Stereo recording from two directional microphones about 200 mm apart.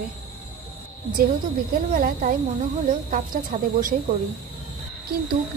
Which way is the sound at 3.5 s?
40° right (ahead or behind).